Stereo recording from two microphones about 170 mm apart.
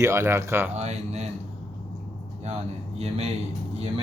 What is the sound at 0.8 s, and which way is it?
Speech, 40° right (ahead or behind).